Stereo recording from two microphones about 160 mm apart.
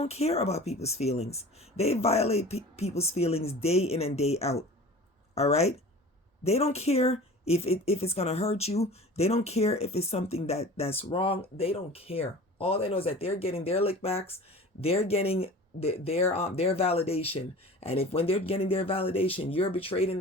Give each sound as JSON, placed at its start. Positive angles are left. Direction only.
{"t": 0.0, "sound": "speech", "side_deg": 40}